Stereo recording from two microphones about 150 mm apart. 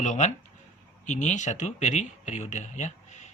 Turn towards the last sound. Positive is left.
turn(degrees=50)  # may be behind; listen again after turning